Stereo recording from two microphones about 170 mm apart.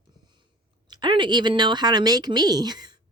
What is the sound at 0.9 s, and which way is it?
Speech, 25° right (ahead or behind).